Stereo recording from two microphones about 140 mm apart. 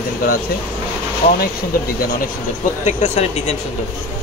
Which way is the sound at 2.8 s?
55° left (ahead or behind).